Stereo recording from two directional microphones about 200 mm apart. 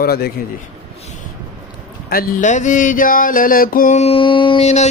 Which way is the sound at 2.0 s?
45° left (ahead or behind).